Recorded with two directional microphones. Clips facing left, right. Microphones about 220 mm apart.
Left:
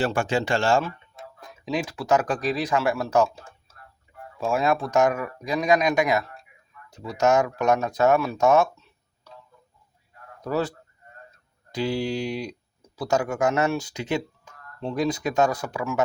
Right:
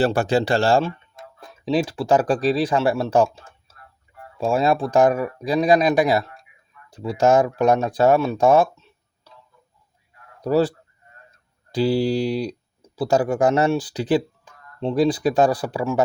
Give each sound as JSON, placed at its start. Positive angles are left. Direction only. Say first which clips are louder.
{"t": 0.0, "sound": "speech", "louder": "right 5 dB", "side_deg": -35}
{"t": 4.4, "sound": "speech", "louder": "right 4 dB", "side_deg": -30}
{"t": 10.4, "sound": "speech", "louder": "right 7 dB", "side_deg": -30}